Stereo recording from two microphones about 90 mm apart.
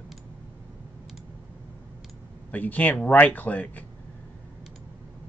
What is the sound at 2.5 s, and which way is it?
Speech, 15° left (ahead or behind).